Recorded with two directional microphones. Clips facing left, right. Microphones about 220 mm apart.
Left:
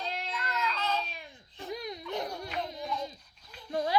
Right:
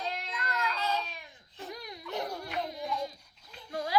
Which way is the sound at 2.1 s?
20° left (ahead or behind).